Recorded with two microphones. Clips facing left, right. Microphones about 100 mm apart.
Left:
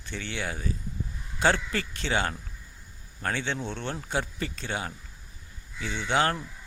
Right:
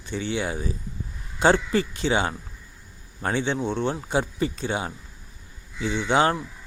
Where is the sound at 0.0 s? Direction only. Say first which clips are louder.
Right 7 dB; 15° right (ahead or behind).